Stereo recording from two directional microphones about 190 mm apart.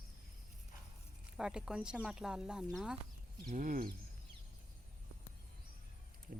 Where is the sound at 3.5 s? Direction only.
45° right (ahead or behind).